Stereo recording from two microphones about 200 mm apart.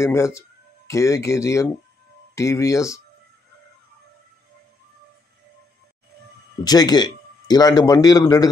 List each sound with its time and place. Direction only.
0.0 s speech: 15° left (ahead or behind)
6.6 s speech: 20° left (ahead or behind)